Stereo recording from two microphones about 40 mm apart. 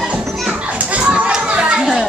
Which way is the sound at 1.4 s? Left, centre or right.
Right.